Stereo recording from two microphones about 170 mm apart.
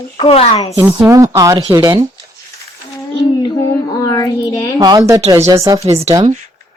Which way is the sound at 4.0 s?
20° left (ahead or behind).